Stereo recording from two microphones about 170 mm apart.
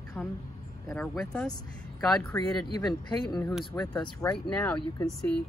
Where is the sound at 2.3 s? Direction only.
20° left (ahead or behind).